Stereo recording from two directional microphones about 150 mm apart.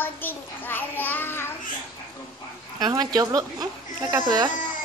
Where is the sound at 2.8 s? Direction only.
25° right (ahead or behind).